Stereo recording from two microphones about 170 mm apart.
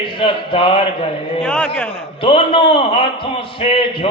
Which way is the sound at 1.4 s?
5° left (ahead or behind).